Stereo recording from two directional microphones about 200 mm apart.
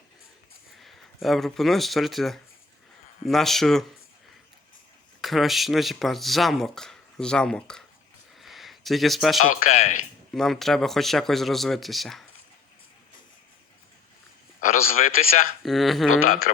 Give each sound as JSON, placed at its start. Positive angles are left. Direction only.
{"t": 0.8, "sound": "speech", "side_deg": 0}
{"t": 5.2, "sound": "speech", "side_deg": 0}
{"t": 8.4, "sound": "a sound", "side_deg": 0}
{"t": 9.5, "sound": "a man's voice", "side_deg": 40}
{"t": 10.3, "sound": "speech", "side_deg": 0}
{"t": 14.6, "sound": "a man's voice", "side_deg": 40}
{"t": 15.6, "sound": "speech", "side_deg": 0}